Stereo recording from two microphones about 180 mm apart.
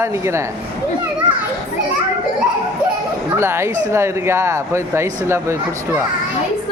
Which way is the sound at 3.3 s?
15° right (ahead or behind).